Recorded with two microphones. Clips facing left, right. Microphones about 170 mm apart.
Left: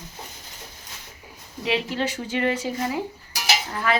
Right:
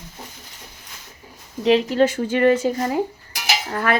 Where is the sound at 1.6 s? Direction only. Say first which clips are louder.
Right 9 dB; 45° right (ahead or behind).